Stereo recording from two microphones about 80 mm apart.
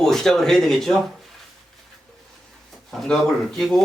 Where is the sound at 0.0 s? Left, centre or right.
Centre.